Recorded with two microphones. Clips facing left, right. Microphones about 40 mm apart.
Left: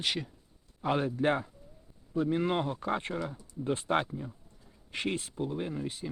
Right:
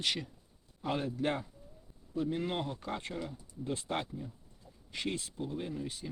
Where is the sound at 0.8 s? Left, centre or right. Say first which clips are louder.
Left 5 dB; left.